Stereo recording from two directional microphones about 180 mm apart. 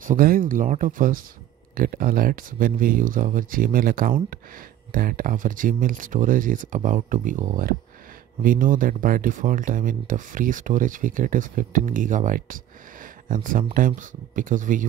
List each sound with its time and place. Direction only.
0.0 s speech: 50° right (ahead or behind)